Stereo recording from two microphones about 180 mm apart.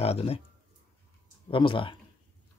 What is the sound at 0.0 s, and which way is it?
Speech, 35° left (ahead or behind).